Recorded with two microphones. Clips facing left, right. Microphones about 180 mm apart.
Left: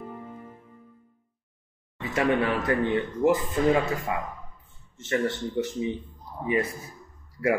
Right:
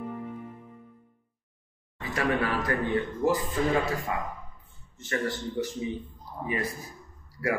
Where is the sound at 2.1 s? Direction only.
25° left (ahead or behind).